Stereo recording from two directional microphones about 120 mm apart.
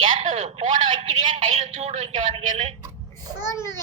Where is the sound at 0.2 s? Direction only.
65° right (ahead or behind).